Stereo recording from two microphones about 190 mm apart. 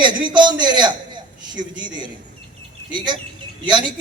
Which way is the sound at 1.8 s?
25° right (ahead or behind).